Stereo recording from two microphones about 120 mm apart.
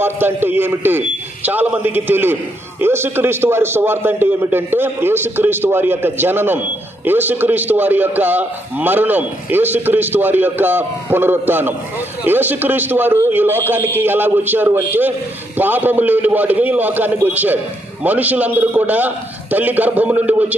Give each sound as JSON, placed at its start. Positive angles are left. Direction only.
{"t": 0.0, "sound": "a man's voice", "side_deg": -20}